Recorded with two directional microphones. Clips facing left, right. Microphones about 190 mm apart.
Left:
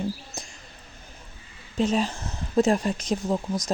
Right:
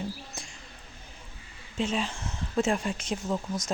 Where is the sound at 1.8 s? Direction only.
40° left (ahead or behind).